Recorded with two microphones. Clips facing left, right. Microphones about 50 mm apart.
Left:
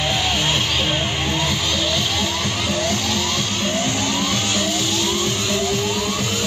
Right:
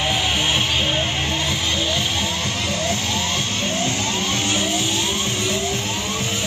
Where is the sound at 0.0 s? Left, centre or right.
Right.